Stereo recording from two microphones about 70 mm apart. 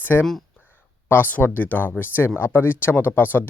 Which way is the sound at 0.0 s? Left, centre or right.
Left.